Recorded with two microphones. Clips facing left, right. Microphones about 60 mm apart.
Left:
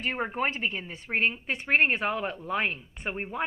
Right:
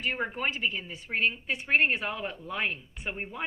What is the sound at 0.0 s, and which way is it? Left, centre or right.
A woman's voice, left.